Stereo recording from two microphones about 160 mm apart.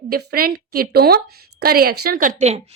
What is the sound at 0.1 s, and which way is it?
A woman's voice, 70° right (ahead or behind).